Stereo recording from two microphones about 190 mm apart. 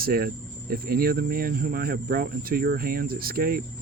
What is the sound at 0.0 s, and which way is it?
Speech, 50° right (ahead or behind).